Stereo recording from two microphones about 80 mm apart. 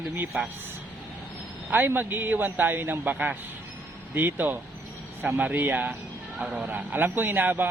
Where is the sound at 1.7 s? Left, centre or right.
Right.